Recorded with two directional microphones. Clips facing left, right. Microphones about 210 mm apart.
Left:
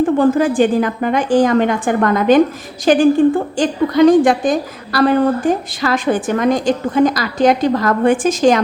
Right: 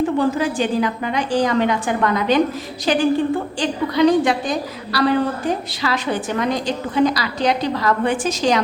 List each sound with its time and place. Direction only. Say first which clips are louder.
0.0 s a woman's voice: left 6 dB; 50° left (ahead or behind)